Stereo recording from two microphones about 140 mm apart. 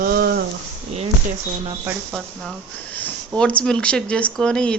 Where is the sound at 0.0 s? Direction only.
90° right.